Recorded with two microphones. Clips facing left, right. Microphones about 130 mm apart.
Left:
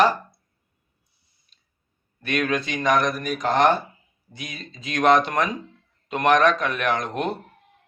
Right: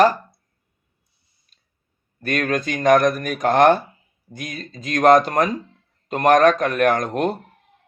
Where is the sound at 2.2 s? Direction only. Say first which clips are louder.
Right 2 dB; 45° right (ahead or behind).